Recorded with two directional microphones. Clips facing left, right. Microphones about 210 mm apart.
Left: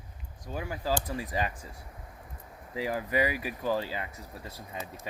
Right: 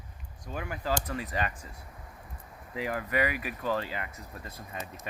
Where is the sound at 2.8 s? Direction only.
10° left (ahead or behind).